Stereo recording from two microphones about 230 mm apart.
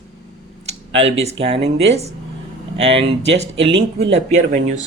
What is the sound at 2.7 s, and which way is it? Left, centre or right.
Speech, right.